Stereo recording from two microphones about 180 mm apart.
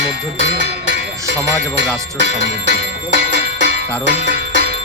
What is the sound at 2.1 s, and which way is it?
Music, 75° right (ahead or behind).